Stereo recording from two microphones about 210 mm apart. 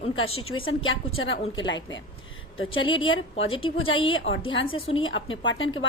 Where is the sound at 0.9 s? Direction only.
65° left (ahead or behind).